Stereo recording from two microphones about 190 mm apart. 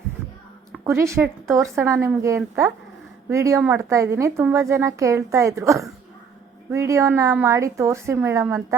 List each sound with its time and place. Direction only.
0.9 s a woman's voice: 15° right (ahead or behind)